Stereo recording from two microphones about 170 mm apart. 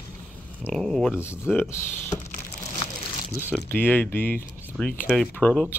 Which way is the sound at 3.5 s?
10° left (ahead or behind).